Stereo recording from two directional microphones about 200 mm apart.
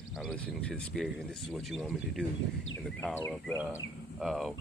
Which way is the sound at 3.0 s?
10° left (ahead or behind).